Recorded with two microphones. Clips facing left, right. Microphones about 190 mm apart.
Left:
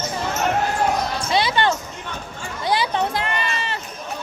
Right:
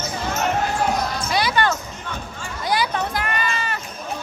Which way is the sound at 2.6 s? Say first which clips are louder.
Left 1 dB; 25° left (ahead or behind).